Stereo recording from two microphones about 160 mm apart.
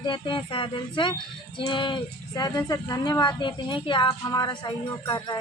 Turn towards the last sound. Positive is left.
turn(degrees=25)  # may be behind; listen again after turning